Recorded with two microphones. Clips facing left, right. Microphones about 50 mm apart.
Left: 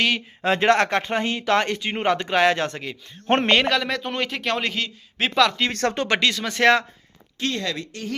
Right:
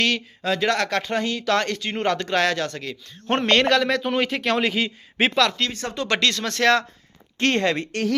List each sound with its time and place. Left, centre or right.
0.4 s speech: left
3.5 s speech: centre
4.8 s a man's voice: centre
5.3 s speech: centre
6.6 s speech: centre
7.3 s speech: right